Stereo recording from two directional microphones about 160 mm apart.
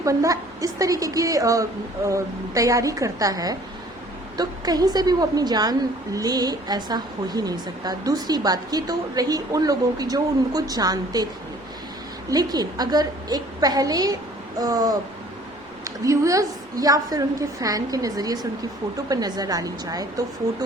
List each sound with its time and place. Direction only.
0.0 s speech: 20° right (ahead or behind)
12.3 s speech: 25° right (ahead or behind)
16.0 s speech: 20° right (ahead or behind)